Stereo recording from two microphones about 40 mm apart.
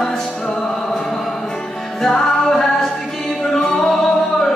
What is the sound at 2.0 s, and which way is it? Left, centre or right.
Music, centre.